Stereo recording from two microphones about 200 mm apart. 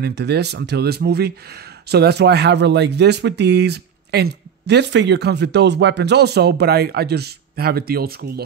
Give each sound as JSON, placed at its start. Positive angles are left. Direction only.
{"t": 0.0, "sound": "speech", "side_deg": -55}